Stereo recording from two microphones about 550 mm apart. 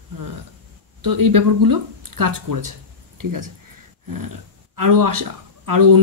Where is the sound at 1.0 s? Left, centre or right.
Right.